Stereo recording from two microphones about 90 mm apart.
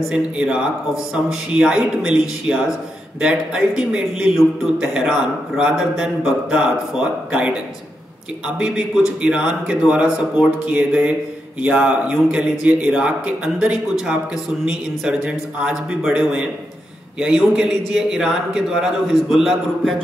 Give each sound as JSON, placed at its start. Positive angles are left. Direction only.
{"t": 0.1, "sound": "a man's voice", "side_deg": -10}
{"t": 8.5, "sound": "a man's voice", "side_deg": -10}